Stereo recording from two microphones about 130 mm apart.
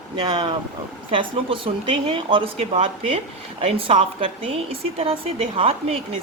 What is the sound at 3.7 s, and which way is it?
Speech, 45° right (ahead or behind).